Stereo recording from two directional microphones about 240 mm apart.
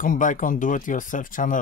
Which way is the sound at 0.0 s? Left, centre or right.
Left.